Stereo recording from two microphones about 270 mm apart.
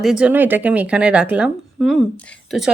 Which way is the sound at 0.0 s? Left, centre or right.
Centre.